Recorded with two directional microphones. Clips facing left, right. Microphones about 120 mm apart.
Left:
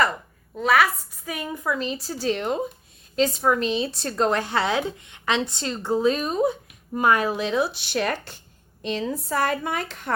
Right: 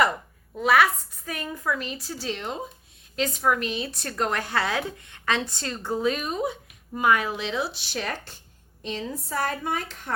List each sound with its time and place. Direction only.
0.5 s a woman's voice: centre (ahead or behind)
1.2 s a woman's voice: 10° left (ahead or behind); by 2.6 s 50° left (ahead or behind)
3.2 s a woman's voice: 30° left (ahead or behind); by 8.4 s 65° left (ahead or behind)
8.8 s speech: 75° left (ahead or behind)